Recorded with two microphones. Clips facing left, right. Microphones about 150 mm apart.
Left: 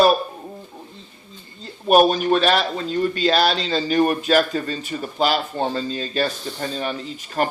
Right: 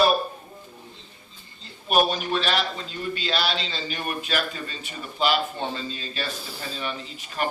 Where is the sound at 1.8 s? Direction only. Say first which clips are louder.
Left 8 dB; 45° left (ahead or behind).